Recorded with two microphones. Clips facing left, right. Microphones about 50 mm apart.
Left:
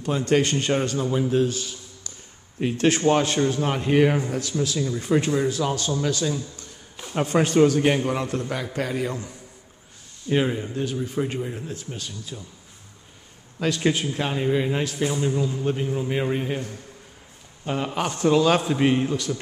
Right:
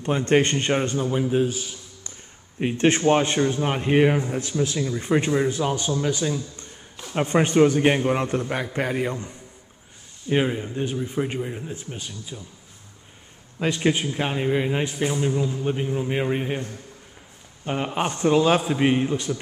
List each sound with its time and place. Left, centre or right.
0.0 s a man's voice: right
1.3 s a man's voice: centre
2.6 s a man's voice: right
4.1 s a man's voice: centre
4.4 s a man's voice: right
7.3 s a man's voice: right
10.2 s a man's voice: centre
11.1 s a man's voice: right
13.6 s a man's voice: right
15.0 s a man's voice: centre
17.6 s a man's voice: right